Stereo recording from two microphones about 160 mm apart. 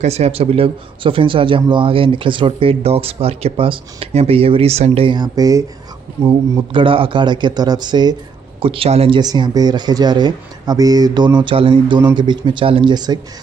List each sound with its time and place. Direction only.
0.0 s speech: 40° right (ahead or behind); by 6.3 s 20° right (ahead or behind)
6.7 s speech: 35° right (ahead or behind)
9.2 s speech: 25° right (ahead or behind)